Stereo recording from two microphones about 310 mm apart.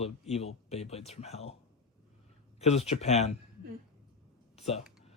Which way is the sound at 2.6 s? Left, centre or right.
Centre.